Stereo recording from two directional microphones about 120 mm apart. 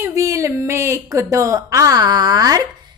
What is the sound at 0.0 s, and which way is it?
A woman's voice, 25° right (ahead or behind).